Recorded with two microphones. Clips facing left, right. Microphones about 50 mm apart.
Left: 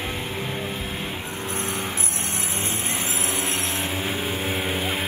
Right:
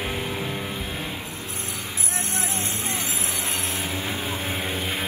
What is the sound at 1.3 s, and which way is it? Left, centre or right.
Vehicle, left.